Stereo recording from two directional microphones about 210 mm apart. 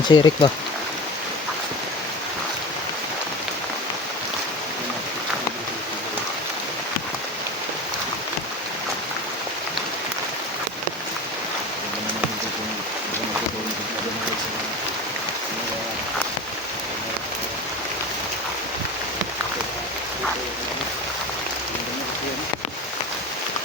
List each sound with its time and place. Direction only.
0.1 s speech: 20° left (ahead or behind)